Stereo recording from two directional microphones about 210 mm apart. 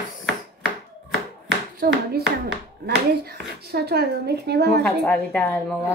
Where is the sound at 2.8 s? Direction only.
50° right (ahead or behind).